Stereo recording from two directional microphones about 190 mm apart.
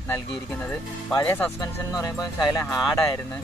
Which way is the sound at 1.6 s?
20° left (ahead or behind).